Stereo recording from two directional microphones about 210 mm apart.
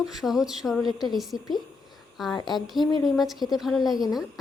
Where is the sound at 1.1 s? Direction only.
Centre (ahead or behind).